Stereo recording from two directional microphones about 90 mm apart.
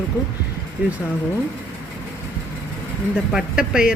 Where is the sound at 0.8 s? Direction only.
15° right (ahead or behind).